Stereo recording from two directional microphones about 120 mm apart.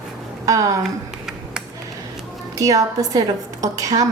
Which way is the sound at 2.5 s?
30° right (ahead or behind).